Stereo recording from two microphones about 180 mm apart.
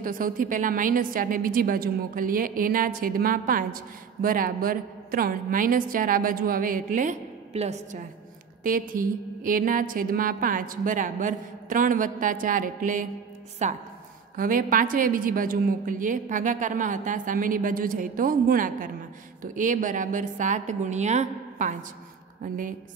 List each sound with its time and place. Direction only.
0.0 s a woman's voice: 50° right (ahead or behind)
8.6 s a woman's voice: 50° right (ahead or behind)